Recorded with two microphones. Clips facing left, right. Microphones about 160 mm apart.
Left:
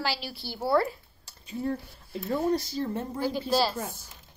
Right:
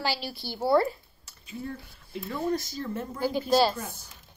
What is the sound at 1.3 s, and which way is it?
Speech, 35° left (ahead or behind).